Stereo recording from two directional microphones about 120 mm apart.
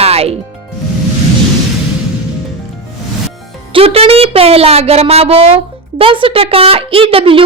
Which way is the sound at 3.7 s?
55° right (ahead or behind).